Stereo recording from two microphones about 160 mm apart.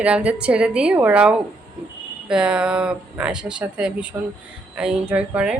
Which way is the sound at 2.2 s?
5° right (ahead or behind).